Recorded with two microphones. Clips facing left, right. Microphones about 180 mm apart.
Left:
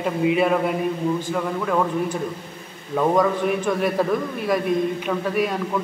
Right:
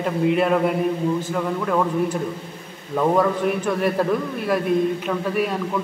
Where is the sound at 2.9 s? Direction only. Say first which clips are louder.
Even; centre (ahead or behind).